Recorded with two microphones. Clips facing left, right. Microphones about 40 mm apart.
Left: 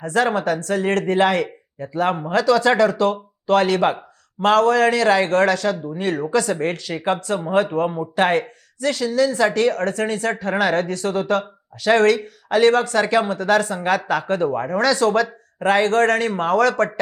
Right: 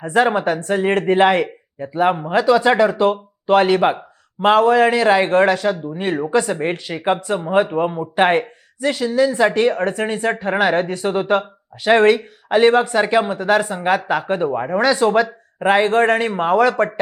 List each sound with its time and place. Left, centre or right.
0.0 s speech: right